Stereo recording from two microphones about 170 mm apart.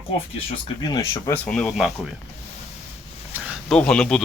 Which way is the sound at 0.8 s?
20° left (ahead or behind).